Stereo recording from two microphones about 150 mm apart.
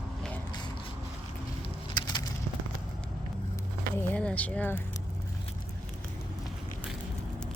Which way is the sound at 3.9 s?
10° left (ahead or behind).